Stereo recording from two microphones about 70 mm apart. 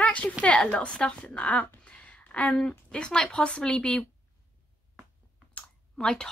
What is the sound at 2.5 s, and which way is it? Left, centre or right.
Speech, centre.